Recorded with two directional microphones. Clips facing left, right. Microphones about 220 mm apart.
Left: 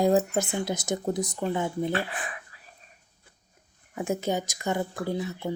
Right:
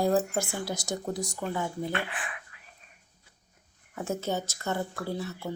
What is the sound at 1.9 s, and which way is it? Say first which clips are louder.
Speech: left 4 dB; 35° left (ahead or behind).